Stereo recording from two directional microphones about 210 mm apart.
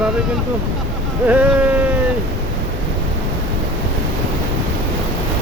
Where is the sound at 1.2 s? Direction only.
5° right (ahead or behind).